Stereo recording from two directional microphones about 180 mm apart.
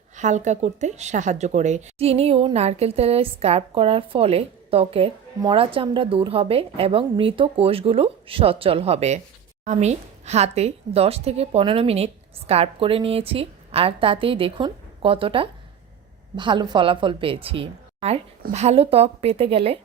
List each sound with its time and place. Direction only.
0.2 s a woman's voice: 40° right (ahead or behind)